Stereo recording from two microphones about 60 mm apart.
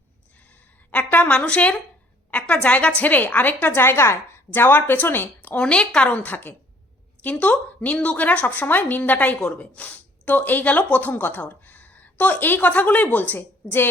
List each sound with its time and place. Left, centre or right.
0.9 s a sound: left
2.3 s a woman's voice: left
5.4 s speech: left